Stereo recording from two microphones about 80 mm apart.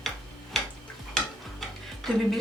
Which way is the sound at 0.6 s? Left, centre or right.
Centre.